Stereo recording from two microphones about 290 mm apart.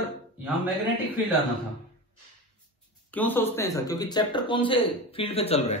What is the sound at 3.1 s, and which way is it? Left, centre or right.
A man's voice, centre.